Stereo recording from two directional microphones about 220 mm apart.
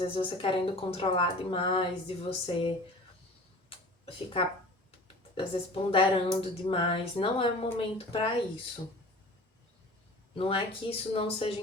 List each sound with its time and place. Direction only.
0.0 s speech: 25° left (ahead or behind)
3.7 s a sound: 25° left (ahead or behind)
5.3 s speech: 25° left (ahead or behind)
10.3 s speech: 25° left (ahead or behind)